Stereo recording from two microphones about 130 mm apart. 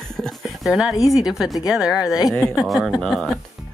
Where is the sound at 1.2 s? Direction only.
5° right (ahead or behind).